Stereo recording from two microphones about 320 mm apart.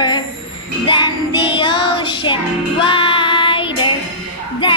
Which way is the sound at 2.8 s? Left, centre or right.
Centre.